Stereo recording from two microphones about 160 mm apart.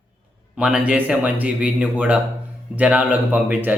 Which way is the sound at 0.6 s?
5° right (ahead or behind).